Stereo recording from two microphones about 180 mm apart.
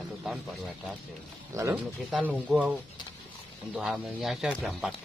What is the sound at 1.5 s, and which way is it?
Speech, 15° right (ahead or behind).